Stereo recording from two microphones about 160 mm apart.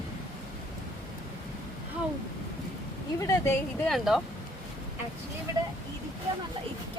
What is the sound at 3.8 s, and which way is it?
Speech, centre (ahead or behind).